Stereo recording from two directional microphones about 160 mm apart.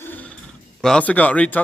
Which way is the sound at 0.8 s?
5° left (ahead or behind).